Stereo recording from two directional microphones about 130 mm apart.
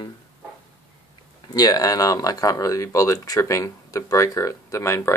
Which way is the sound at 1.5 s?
30° left (ahead or behind).